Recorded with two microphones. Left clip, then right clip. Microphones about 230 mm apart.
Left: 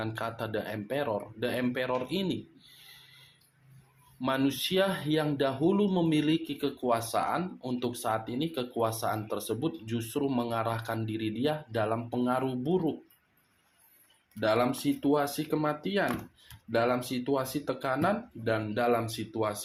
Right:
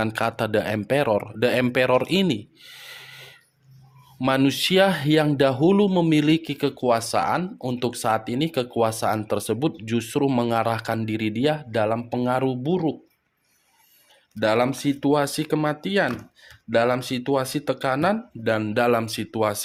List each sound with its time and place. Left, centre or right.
0.0 s speech: right
14.3 s speech: right